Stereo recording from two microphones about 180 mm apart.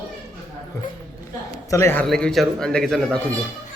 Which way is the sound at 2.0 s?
Centre (ahead or behind).